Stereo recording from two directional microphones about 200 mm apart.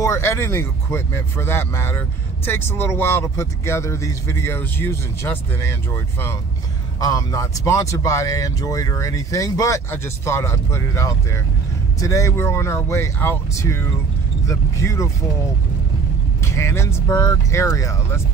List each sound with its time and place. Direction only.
0.0 s speech: 15° left (ahead or behind)
16.4 s speech: 15° left (ahead or behind)